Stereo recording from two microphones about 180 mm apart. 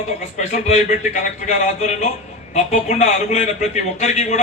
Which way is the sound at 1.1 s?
40° left (ahead or behind).